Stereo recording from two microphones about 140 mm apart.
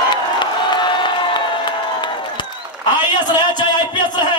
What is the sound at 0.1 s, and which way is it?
Crowd, 35° left (ahead or behind).